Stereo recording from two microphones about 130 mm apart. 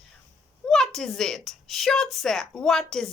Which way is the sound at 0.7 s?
5° left (ahead or behind).